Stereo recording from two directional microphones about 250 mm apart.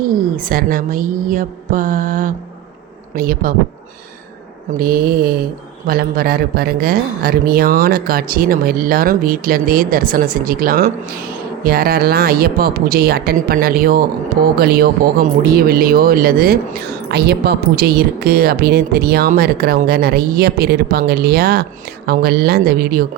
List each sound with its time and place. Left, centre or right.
0.1 s a woman's voice: right
4.8 s a woman's voice: right